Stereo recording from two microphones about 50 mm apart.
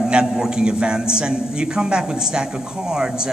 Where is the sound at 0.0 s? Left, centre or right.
Centre.